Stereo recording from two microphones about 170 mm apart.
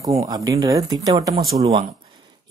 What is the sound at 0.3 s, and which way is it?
Speech, 20° right (ahead or behind).